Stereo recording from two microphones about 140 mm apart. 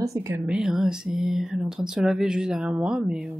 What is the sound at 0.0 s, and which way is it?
Speech, 20° right (ahead or behind).